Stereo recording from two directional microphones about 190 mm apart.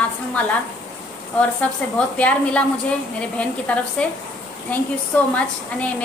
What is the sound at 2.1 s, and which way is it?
Speech, 5° left (ahead or behind).